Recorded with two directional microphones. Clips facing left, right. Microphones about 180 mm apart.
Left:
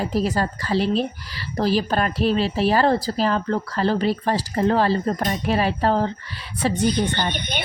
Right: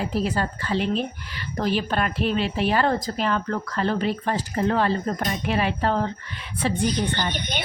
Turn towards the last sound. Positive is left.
turn(degrees=60)  # may be behind; listen again after turning